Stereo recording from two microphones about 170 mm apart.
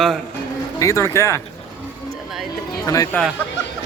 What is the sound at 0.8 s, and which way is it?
Speech, 15° left (ahead or behind).